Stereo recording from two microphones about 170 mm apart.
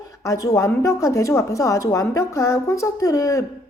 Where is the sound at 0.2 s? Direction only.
20° left (ahead or behind).